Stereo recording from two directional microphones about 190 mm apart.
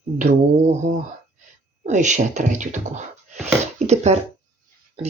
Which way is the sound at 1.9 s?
40° right (ahead or behind).